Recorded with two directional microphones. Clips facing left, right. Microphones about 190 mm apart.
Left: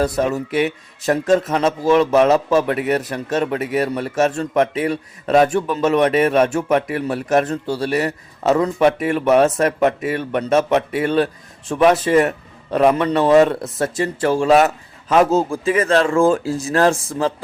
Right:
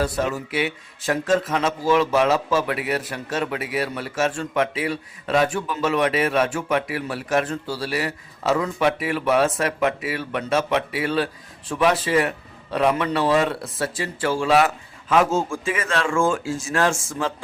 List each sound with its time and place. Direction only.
0.0 s speech: 40° left (ahead or behind)